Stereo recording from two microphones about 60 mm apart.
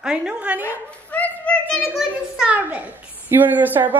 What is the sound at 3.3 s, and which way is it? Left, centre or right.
Speech, right.